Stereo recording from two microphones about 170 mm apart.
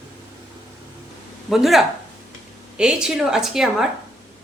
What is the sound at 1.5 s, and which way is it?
A woman's voice, centre (ahead or behind).